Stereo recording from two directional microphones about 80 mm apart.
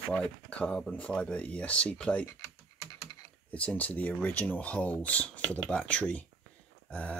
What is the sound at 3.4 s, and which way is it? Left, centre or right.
Speech, centre.